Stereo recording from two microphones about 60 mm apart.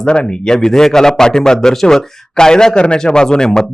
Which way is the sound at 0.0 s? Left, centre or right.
Centre.